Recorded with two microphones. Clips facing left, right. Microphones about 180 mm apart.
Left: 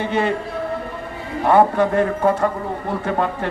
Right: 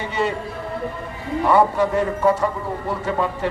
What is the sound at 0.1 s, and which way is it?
Speech, 55° left (ahead or behind).